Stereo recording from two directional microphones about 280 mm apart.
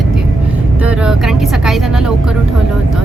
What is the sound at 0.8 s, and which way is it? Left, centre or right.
Speech, centre.